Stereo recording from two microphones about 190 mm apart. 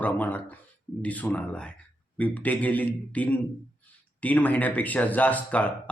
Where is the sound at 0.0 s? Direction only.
10° left (ahead or behind).